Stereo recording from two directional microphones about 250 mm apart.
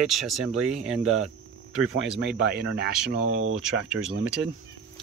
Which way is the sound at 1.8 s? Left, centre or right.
Right.